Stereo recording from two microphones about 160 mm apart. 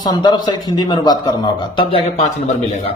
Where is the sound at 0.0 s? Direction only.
25° left (ahead or behind).